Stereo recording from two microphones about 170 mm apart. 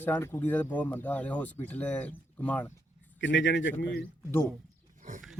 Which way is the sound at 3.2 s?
90° left.